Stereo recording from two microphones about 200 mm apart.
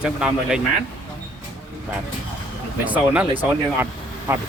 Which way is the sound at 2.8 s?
5° right (ahead or behind).